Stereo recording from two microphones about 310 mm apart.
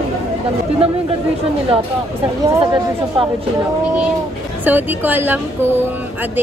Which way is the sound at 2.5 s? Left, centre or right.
Centre.